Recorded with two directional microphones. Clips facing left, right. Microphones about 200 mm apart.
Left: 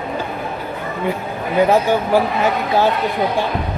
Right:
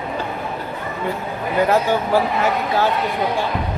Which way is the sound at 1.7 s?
15° left (ahead or behind).